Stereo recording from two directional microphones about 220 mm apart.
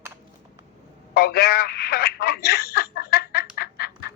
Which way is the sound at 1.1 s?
45° left (ahead or behind).